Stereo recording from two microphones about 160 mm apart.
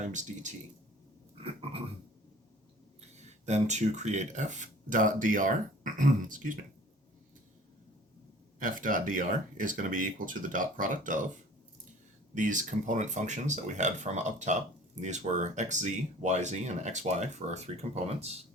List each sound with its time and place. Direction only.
0.1 s speech: 50° right (ahead or behind)
1.4 s a sound: 35° right (ahead or behind)
3.0 s speech: 45° right (ahead or behind)
8.5 s speech: 55° right (ahead or behind)
12.3 s speech: 50° right (ahead or behind)